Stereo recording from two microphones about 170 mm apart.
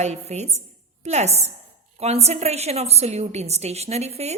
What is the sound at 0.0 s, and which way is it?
A woman's voice, 40° right (ahead or behind).